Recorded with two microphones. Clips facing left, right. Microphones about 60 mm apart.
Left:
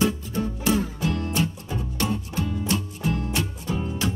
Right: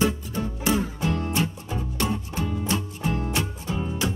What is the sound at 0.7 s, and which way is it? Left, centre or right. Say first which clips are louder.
Music: even; right.